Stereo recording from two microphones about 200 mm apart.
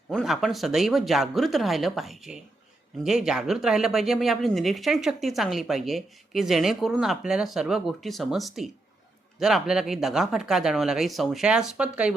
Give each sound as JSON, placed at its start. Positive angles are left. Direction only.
{"t": 0.1, "sound": "speech", "side_deg": 0}